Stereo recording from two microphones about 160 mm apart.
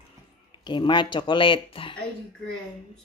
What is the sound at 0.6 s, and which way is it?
Speech, 30° left (ahead or behind).